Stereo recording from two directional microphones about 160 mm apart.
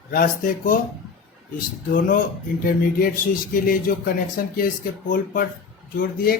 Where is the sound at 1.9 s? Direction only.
60° left (ahead or behind).